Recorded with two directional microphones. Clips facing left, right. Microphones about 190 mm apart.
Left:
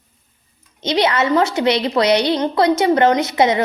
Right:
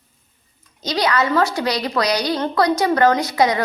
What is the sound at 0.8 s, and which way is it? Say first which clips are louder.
A woman's voice: left 3 dB; 25° left (ahead or behind).